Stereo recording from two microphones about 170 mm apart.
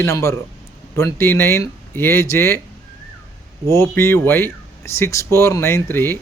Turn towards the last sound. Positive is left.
turn(degrees=15)  # may be behind; listen again after turning